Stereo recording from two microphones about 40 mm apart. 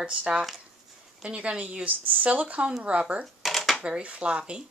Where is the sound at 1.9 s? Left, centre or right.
Right.